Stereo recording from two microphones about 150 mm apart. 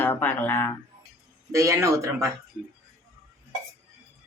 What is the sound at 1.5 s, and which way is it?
Speech, 20° right (ahead or behind).